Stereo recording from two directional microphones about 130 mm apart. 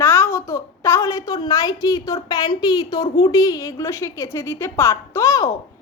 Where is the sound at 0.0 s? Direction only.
20° left (ahead or behind).